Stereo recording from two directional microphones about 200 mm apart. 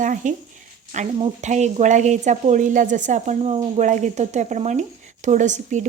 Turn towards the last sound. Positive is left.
turn(degrees=-35)  # may be behind; listen again after turning